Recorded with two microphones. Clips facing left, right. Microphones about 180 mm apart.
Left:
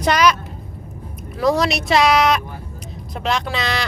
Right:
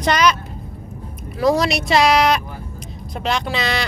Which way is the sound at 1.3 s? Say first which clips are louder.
Right 1 dB; centre (ahead or behind).